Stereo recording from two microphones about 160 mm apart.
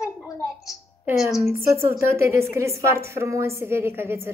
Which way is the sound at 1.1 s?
Centre (ahead or behind).